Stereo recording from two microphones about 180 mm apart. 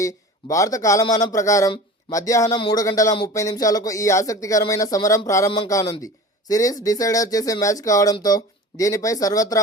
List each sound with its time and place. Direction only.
0.0 s speech: 20° left (ahead or behind)